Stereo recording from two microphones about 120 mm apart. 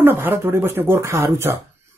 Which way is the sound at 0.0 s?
20° right (ahead or behind).